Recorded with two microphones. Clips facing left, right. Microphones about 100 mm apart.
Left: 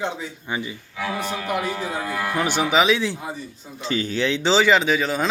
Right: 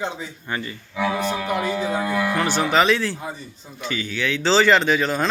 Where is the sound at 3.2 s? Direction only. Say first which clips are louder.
Left 1 dB; 5° left (ahead or behind).